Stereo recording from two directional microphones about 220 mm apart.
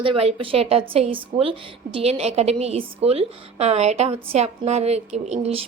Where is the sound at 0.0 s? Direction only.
25° right (ahead or behind).